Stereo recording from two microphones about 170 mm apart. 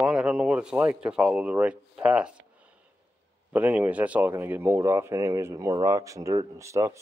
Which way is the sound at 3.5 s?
10° right (ahead or behind).